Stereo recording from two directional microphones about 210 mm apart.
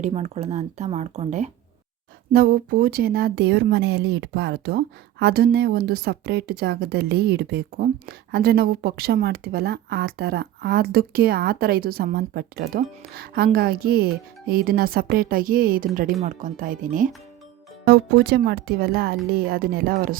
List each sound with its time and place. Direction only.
0.0 s speech: 30° right (ahead or behind)
2.3 s speech: 45° right (ahead or behind)